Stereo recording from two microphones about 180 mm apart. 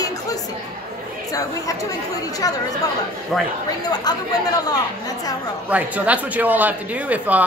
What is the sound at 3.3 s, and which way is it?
Speech, centre (ahead or behind).